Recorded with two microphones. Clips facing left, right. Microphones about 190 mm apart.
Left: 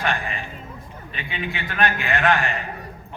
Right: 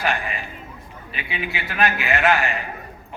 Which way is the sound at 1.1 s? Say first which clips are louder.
Right 1 dB; 10° right (ahead or behind).